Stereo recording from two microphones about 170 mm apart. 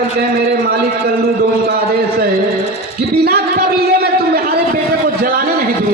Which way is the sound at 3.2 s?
65° right (ahead or behind).